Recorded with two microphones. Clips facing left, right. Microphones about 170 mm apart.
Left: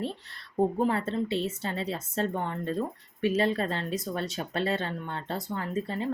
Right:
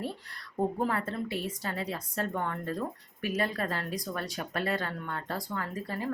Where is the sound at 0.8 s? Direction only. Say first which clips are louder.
Left 4 dB; 25° left (ahead or behind).